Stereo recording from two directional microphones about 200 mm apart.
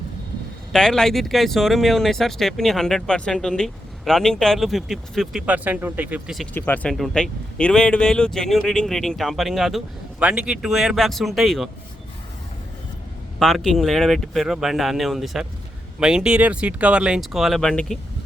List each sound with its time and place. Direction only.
0.7 s speech: 5° left (ahead or behind)
6.5 s speech: 10° left (ahead or behind)
13.4 s speech: centre (ahead or behind)